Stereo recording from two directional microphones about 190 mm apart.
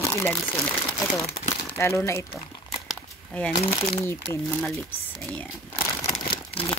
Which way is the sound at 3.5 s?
20° left (ahead or behind).